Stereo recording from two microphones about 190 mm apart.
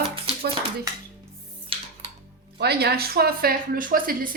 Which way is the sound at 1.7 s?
30° right (ahead or behind).